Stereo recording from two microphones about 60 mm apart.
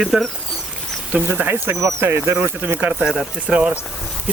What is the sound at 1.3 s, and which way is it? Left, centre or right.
Speech, right.